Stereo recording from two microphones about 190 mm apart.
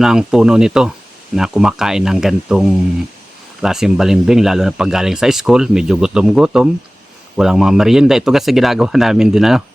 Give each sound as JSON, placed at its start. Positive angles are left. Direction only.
{"t": 0.0, "sound": "speech", "side_deg": -5}